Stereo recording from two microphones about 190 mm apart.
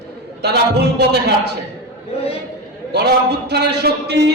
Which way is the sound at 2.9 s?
60° right (ahead or behind).